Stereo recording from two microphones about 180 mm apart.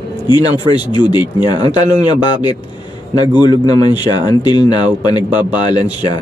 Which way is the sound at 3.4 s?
25° left (ahead or behind).